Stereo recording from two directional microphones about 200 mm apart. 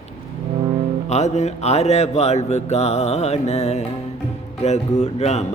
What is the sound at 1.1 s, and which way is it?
Mantra, 35° left (ahead or behind).